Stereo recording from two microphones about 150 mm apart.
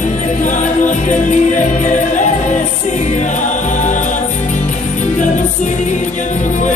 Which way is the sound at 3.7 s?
55° left (ahead or behind).